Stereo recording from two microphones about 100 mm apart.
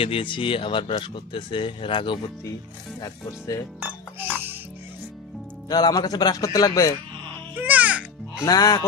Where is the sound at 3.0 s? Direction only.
35° left (ahead or behind).